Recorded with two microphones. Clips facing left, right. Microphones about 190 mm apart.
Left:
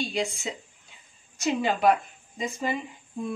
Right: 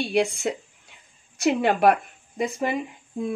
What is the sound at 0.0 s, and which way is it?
Speech, 60° right (ahead or behind).